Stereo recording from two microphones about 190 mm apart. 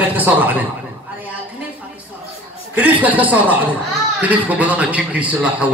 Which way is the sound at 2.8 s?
10° right (ahead or behind).